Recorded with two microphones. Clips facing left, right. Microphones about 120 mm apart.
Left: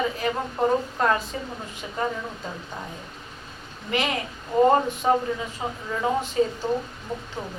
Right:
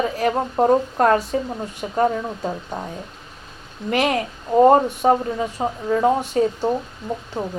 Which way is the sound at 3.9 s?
50° right (ahead or behind).